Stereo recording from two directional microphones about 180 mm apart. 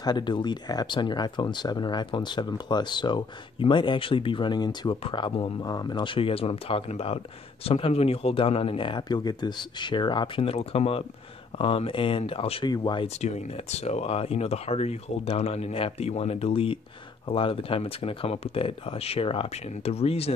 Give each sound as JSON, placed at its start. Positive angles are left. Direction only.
{"t": 0.0, "sound": "speech", "side_deg": 25}
{"t": 13.2, "sound": "speech", "side_deg": 35}